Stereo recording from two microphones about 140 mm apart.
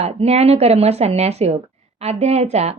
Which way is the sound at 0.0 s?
50° right (ahead or behind).